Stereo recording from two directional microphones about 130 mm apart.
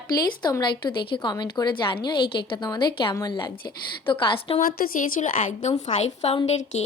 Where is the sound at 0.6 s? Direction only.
35° left (ahead or behind).